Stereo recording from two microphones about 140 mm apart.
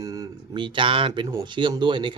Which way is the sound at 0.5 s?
35° right (ahead or behind).